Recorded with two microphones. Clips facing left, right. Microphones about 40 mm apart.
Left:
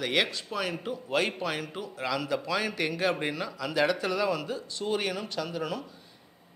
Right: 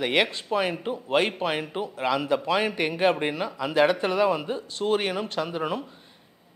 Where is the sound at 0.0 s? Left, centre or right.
Right.